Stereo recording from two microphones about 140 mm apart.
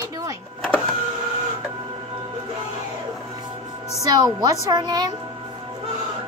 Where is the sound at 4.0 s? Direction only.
30° right (ahead or behind).